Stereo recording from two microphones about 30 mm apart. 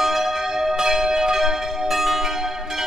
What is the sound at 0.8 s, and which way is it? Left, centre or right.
Church bell, centre.